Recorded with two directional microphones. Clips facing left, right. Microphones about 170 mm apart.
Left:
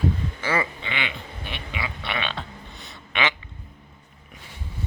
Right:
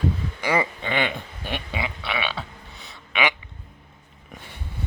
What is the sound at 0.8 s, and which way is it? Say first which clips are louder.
Speech: right 6 dB; 45° right (ahead or behind).